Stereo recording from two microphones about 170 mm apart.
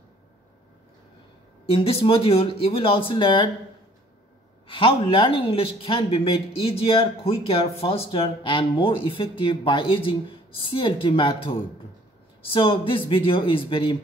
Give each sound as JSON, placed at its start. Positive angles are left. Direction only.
{"t": 1.7, "sound": "speech", "side_deg": 30}
{"t": 4.6, "sound": "speech", "side_deg": 30}